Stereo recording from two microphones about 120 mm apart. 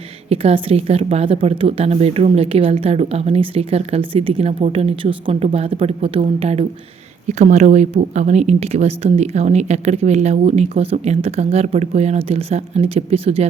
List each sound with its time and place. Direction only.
0.3 s a woman's voice: 55° right (ahead or behind)
7.3 s a woman's voice: 75° right (ahead or behind); by 13.5 s 55° right (ahead or behind)